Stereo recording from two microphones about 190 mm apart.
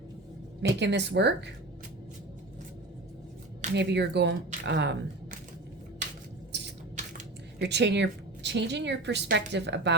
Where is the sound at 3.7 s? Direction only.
65° right (ahead or behind).